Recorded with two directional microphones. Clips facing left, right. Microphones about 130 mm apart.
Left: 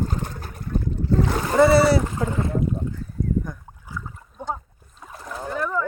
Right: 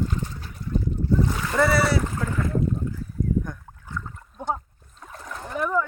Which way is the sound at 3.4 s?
5° left (ahead or behind).